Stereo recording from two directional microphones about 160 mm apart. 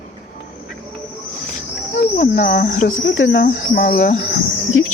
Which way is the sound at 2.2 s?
60° left (ahead or behind).